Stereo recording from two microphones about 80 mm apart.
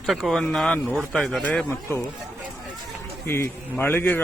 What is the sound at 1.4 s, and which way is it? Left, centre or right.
Speech, centre.